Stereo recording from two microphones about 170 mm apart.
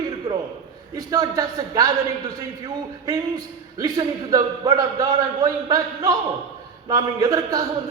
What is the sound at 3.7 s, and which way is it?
A man's voice, 20° right (ahead or behind).